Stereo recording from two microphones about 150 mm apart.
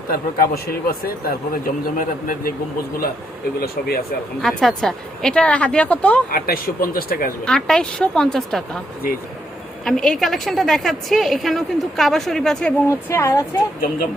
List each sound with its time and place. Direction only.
0.1 s speech: 90° left; by 2.5 s 65° left (ahead or behind)
3.6 s speech: 85° left
4.4 s a woman's voice: centre (ahead or behind)
6.3 s speech: 75° left (ahead or behind)
7.4 s a woman's voice: 5° left (ahead or behind)
9.8 s a woman's voice: centre (ahead or behind)
13.1 s speech: 20° left (ahead or behind)